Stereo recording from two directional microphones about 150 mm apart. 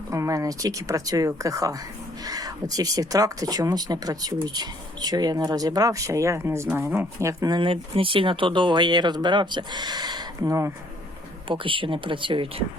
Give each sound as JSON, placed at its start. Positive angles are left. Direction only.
{"t": 0.1, "sound": "speech", "side_deg": -20}
{"t": 11.4, "sound": "speech", "side_deg": -35}